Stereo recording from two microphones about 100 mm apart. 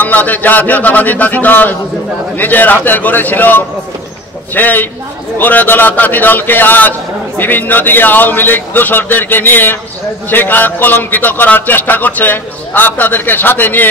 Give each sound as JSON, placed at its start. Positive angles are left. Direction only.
{"t": 0.0, "sound": "a man's voice", "side_deg": 15}